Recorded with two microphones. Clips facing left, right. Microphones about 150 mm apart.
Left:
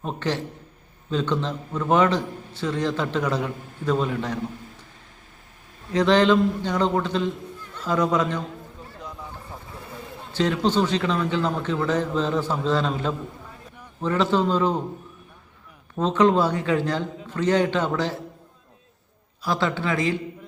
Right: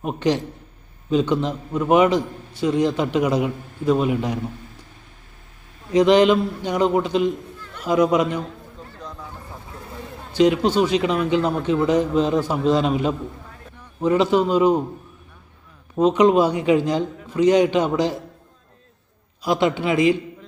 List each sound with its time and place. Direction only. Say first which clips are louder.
0.0 s a man's voice: right 6 dB; 15° right (ahead or behind)
5.9 s a man's voice: right 4 dB; 15° right (ahead or behind)
10.3 s a man's voice: right 5 dB; 15° right (ahead or behind)
16.0 s a man's voice: right 4 dB; 15° right (ahead or behind)
19.4 s a man's voice: right 5 dB; 15° right (ahead or behind)